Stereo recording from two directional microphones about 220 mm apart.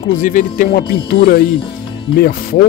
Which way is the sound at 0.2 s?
35° left (ahead or behind).